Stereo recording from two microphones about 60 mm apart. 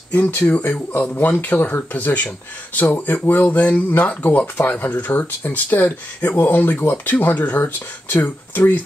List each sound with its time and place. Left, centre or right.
0.1 s speech: left